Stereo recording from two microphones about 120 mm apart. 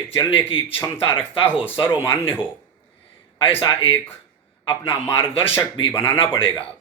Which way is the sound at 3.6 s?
45° left (ahead or behind).